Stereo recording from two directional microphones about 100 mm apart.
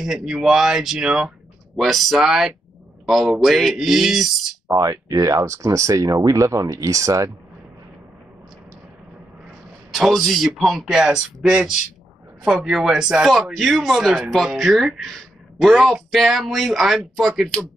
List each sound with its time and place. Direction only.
0.0 s speech: 5° right (ahead or behind)
4.6 s speech: 30° right (ahead or behind)
9.8 s speech: centre (ahead or behind)